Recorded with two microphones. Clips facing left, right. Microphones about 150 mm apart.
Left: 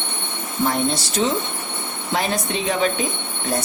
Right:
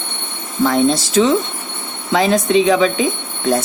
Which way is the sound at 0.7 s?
90° right.